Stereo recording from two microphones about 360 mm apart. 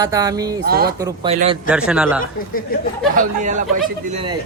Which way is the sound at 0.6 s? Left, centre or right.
Right.